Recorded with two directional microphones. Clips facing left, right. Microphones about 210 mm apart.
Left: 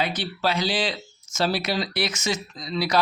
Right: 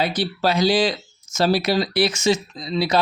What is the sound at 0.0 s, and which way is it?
Speech, 35° right (ahead or behind).